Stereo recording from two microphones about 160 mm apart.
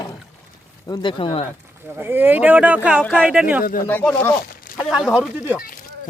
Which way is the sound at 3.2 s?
10° right (ahead or behind).